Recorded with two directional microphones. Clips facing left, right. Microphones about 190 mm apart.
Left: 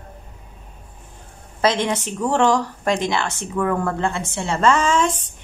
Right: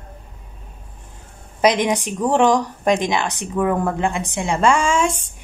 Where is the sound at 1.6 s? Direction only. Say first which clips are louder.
Right 3 dB; 15° right (ahead or behind).